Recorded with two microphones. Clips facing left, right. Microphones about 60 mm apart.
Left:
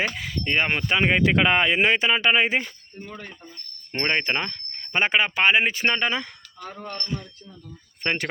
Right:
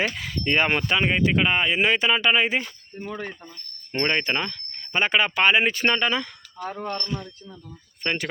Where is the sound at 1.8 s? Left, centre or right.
Left.